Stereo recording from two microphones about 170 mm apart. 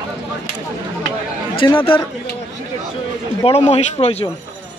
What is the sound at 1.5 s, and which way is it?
Speech, 30° left (ahead or behind).